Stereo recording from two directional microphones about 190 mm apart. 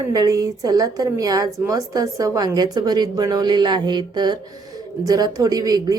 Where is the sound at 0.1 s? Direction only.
20° right (ahead or behind).